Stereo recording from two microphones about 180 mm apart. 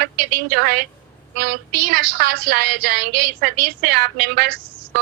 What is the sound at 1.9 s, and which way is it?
A woman's voice, 60° right (ahead or behind).